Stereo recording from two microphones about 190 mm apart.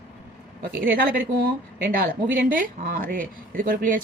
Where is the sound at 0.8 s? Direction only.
50° right (ahead or behind).